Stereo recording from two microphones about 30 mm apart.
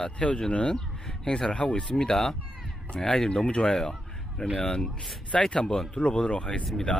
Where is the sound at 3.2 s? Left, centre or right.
Left.